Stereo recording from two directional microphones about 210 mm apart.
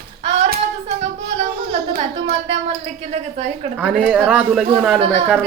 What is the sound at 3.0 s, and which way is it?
Speech, 30° right (ahead or behind).